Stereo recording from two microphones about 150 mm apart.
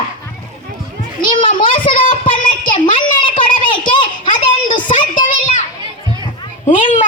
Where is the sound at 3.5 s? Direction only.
35° left (ahead or behind).